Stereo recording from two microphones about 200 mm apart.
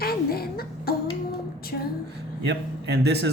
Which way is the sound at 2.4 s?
55° right (ahead or behind).